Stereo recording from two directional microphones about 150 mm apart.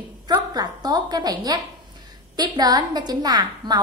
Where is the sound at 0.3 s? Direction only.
25° right (ahead or behind).